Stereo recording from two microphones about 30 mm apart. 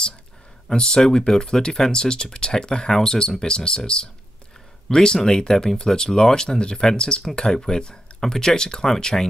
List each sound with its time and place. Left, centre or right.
0.7 s speech: left